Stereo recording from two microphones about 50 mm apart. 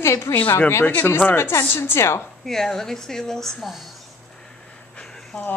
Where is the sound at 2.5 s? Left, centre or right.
Centre.